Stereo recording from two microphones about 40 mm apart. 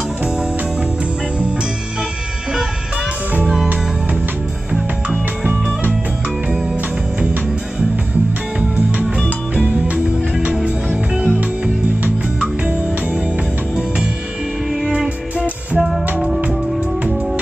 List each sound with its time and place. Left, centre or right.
8.5 s music: right
14.9 s music: right